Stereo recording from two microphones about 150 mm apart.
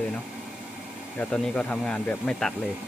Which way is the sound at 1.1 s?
5° left (ahead or behind).